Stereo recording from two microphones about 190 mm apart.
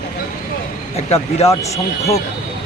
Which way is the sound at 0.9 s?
35° left (ahead or behind).